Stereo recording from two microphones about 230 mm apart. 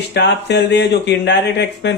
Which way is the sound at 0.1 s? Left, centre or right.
Left.